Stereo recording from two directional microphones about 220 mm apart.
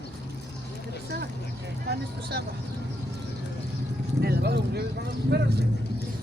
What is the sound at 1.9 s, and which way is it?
Speech, 45° right (ahead or behind).